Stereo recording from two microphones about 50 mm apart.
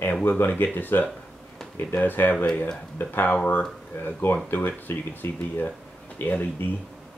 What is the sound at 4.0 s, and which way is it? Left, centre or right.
Speech, left.